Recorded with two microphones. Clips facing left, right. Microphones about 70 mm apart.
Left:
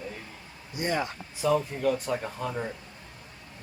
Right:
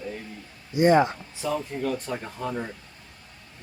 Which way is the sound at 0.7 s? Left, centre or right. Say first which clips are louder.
Right 11 dB; right.